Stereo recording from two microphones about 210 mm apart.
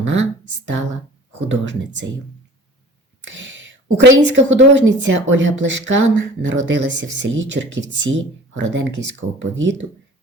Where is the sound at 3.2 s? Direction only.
60° right (ahead or behind).